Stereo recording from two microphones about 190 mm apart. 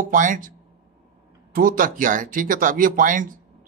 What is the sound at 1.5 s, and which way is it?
Speech, 45° right (ahead or behind).